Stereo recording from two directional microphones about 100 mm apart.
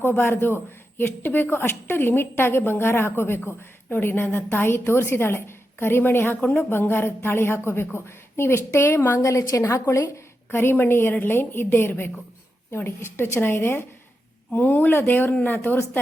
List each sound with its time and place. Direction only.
0.0 s a man's voice: 25° left (ahead or behind)